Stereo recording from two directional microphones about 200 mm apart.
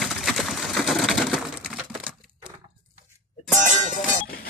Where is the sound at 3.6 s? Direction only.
40° right (ahead or behind).